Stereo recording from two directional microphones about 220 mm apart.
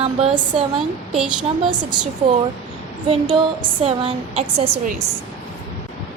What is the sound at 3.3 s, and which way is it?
Speech, 25° right (ahead or behind).